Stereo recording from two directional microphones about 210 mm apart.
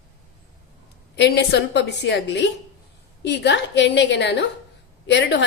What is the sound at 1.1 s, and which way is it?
A woman's voice, 55° left (ahead or behind).